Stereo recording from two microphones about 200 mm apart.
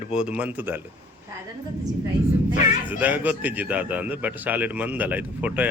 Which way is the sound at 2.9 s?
10° right (ahead or behind).